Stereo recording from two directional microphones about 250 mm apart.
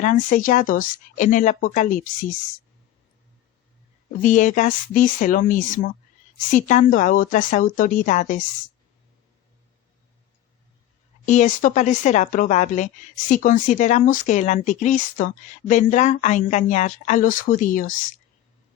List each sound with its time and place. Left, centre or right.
0.0 s speech: left
4.2 s speech: left
11.3 s speech: left